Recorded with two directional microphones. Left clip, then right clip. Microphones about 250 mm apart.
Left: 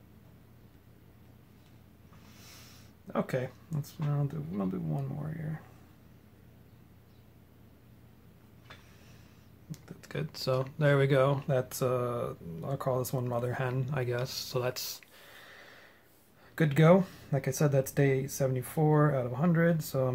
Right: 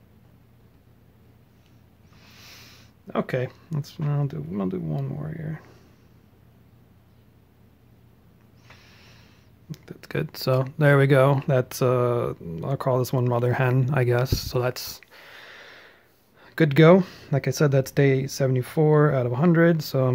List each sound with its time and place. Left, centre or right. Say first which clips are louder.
2.2 s speech: right 8 dB; right
9.7 s speech: right 9 dB; right